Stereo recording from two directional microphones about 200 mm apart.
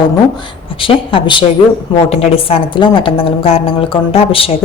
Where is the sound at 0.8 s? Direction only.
25° left (ahead or behind).